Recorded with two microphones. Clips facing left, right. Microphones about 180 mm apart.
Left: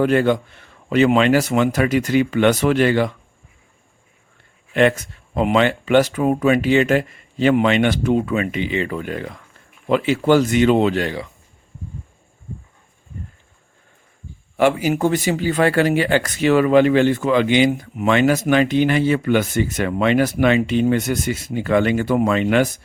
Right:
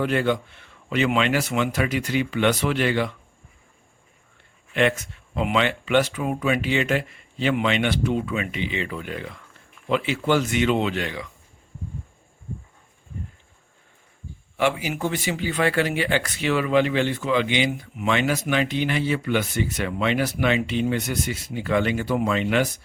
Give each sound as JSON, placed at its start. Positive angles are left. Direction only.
{"t": 0.0, "sound": "speech", "side_deg": 45}
{"t": 4.7, "sound": "speech", "side_deg": 40}
{"t": 14.5, "sound": "speech", "side_deg": 45}